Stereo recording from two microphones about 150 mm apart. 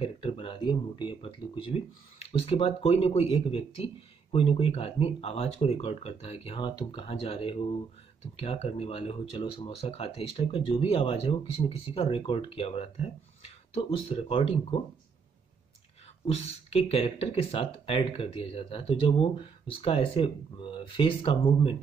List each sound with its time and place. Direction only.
0.0 s speech: 35° left (ahead or behind)
6.7 s speech: 30° left (ahead or behind)
16.3 s speech: 40° left (ahead or behind)